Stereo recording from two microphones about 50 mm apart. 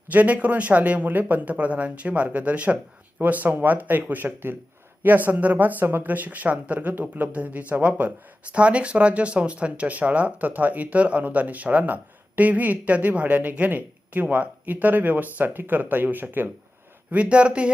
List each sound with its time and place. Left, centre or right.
0.1 s speech: right
17.1 s speech: right